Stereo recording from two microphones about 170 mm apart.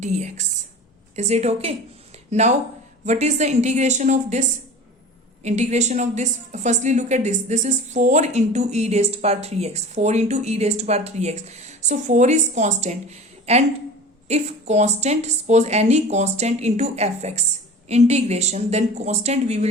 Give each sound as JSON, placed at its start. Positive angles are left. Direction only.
{"t": 0.0, "sound": "a woman's voice", "side_deg": -45}